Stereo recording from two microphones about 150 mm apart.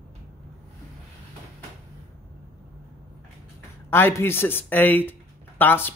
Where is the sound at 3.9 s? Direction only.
15° left (ahead or behind).